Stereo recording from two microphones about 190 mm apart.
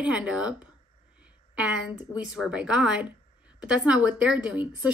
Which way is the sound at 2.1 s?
5° right (ahead or behind).